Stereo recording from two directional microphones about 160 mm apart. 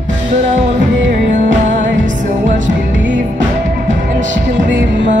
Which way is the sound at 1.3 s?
55° right (ahead or behind).